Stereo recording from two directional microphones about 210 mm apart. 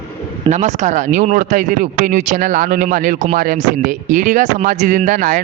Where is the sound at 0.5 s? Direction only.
35° right (ahead or behind).